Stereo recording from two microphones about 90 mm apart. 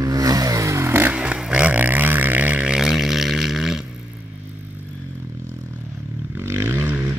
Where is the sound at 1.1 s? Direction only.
15° right (ahead or behind).